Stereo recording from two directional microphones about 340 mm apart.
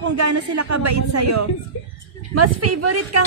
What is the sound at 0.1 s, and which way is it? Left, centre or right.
Speech, right.